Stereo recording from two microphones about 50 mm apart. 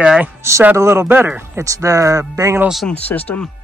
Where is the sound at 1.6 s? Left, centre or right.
Right.